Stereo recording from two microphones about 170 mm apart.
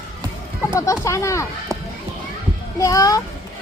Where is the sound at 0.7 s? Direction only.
20° left (ahead or behind).